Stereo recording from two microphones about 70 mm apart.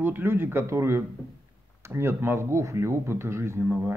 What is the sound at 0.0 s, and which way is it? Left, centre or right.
A man's voice, right.